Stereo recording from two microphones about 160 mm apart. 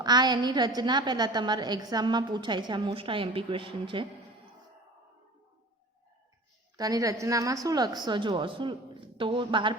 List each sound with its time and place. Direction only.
0.0 s a woman's voice: 25° right (ahead or behind)
6.7 s a woman's voice: 20° right (ahead or behind)